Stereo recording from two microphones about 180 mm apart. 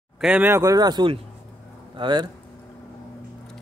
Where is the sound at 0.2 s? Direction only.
5° right (ahead or behind); by 2.2 s 25° right (ahead or behind).